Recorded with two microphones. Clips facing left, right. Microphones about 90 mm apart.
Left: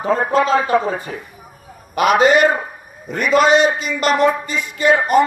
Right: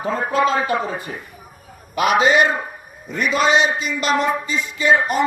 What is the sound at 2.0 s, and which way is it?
A man's voice, 45° left (ahead or behind).